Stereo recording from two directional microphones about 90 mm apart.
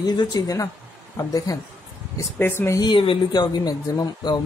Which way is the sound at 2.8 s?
70° left (ahead or behind).